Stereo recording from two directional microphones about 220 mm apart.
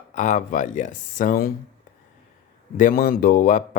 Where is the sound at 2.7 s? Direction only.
40° left (ahead or behind).